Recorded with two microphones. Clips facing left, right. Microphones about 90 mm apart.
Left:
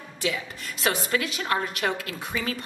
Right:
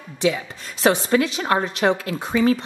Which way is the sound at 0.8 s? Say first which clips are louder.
Right 8 dB; 25° right (ahead or behind).